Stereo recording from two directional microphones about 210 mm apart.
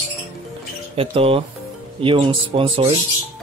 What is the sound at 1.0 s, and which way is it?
Speech, 25° right (ahead or behind).